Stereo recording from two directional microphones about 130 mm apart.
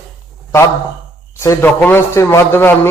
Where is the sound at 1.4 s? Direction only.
20° left (ahead or behind).